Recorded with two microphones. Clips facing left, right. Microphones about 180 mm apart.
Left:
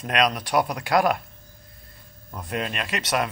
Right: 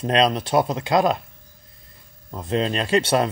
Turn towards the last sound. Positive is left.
turn(degrees=-30)  # may be behind; listen again after turning